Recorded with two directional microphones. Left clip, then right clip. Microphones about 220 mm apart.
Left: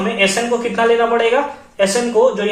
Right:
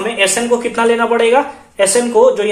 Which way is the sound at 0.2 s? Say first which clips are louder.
Right 3 dB; 50° right (ahead or behind).